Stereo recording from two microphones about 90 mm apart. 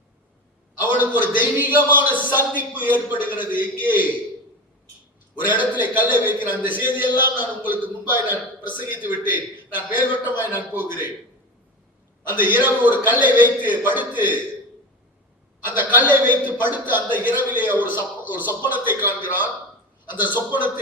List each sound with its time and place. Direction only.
0.8 s a man's voice: 20° right (ahead or behind)
5.5 s a man's voice: 20° right (ahead or behind)
12.3 s a man's voice: 20° right (ahead or behind)
15.6 s a man's voice: 25° right (ahead or behind)